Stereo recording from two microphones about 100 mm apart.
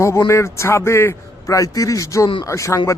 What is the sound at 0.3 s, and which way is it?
A man's voice, 30° left (ahead or behind).